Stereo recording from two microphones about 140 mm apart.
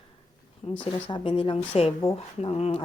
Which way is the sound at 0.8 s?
35° left (ahead or behind).